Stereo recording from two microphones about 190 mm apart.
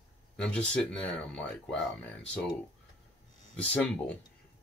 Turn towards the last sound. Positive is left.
turn(degrees=5)  # may be behind; listen again after turning